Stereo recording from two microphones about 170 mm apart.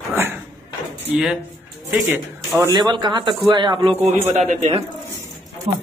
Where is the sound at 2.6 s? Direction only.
20° right (ahead or behind); by 4.4 s 40° right (ahead or behind).